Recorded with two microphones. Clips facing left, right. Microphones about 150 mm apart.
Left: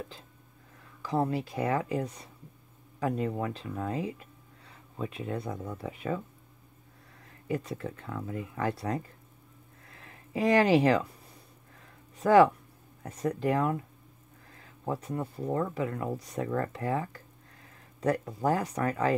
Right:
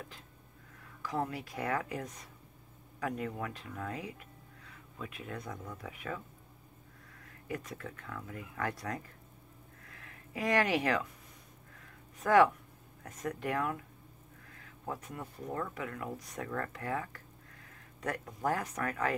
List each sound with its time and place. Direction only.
1.0 s speech: 30° left (ahead or behind)
7.4 s speech: 30° left (ahead or behind)
9.8 s a sound: 30° left (ahead or behind)
12.2 s speech: 30° left (ahead or behind)